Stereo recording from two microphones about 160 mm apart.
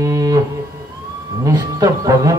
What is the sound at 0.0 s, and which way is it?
Music, 20° right (ahead or behind).